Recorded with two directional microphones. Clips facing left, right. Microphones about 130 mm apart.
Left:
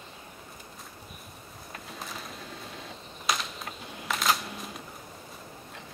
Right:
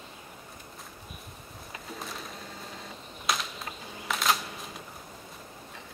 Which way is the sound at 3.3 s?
Centre (ahead or behind).